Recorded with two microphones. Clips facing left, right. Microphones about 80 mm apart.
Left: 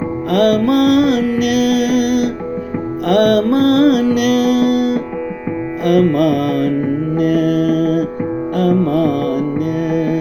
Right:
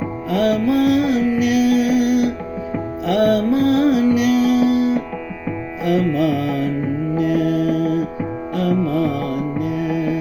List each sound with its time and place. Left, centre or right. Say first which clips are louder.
0.3 s music: left 4 dB; left
7.2 s mantra: left 4 dB; left
8.5 s music: left 4 dB; left